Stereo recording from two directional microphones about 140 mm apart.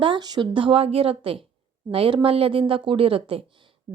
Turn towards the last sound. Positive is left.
turn(degrees=-40)  # may be behind; listen again after turning